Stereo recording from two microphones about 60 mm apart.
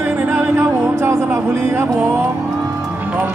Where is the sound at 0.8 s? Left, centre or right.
Right.